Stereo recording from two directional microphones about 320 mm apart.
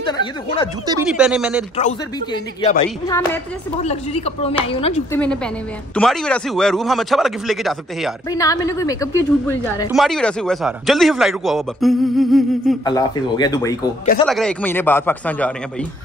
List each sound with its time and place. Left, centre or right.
0.0 s speech: centre
0.8 s a woman's voice: centre
1.8 s speech: left
5.1 s a woman's voice: centre
8.3 s a woman's voice: centre
12.8 s a woman's voice: centre